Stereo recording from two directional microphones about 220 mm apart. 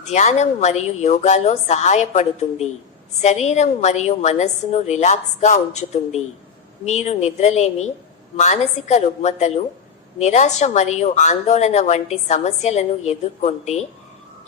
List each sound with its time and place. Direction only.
0.0 s a woman's voice: 30° left (ahead or behind)